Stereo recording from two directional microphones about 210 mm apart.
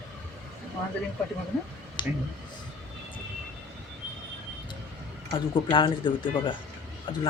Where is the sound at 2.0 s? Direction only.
20° left (ahead or behind).